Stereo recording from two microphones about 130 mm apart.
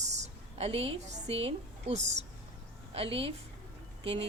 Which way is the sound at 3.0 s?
45° right (ahead or behind).